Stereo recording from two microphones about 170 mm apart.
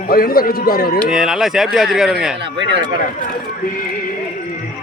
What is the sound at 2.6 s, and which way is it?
Speech, 90° right.